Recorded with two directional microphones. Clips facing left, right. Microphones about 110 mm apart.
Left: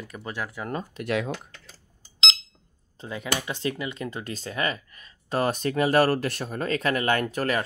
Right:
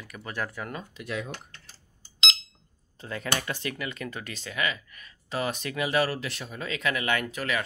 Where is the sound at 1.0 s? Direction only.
75° left (ahead or behind).